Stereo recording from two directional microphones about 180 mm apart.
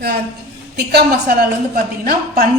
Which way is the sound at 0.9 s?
60° right (ahead or behind).